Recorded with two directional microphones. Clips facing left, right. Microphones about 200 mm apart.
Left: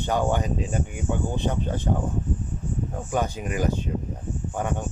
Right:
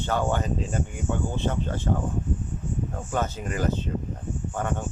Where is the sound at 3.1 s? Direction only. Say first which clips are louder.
Left 2 dB; 15° left (ahead or behind).